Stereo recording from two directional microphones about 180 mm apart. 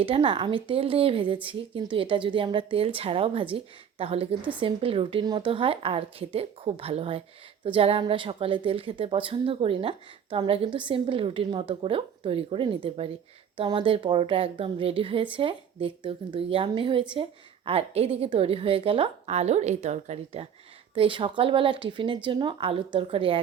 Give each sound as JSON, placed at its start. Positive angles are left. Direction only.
{"t": 0.0, "sound": "a woman's voice", "side_deg": -30}